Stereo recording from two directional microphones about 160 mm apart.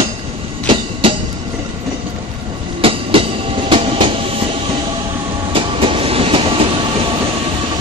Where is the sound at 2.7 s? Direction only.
35° right (ahead or behind).